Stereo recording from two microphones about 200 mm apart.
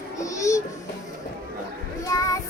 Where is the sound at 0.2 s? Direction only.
15° left (ahead or behind).